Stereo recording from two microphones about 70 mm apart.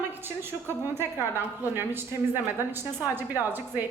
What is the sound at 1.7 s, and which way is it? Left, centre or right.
A woman's voice, right.